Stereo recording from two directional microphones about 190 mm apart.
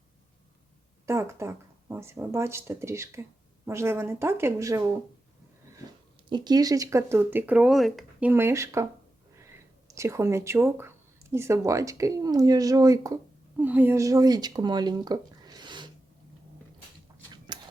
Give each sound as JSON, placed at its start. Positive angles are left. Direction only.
{"t": 1.0, "sound": "speech", "side_deg": -15}
{"t": 6.3, "sound": "speech", "side_deg": -20}
{"t": 8.3, "sound": "speech", "side_deg": -15}
{"t": 9.9, "sound": "speech", "side_deg": -15}
{"t": 17.3, "sound": "a sound", "side_deg": -25}